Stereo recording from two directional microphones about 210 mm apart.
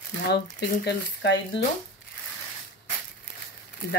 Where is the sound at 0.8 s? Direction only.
55° left (ahead or behind).